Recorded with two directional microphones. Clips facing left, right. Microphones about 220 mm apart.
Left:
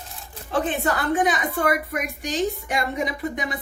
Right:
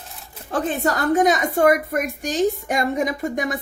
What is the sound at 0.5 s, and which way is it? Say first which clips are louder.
A woman's voice: right 2 dB; 40° right (ahead or behind).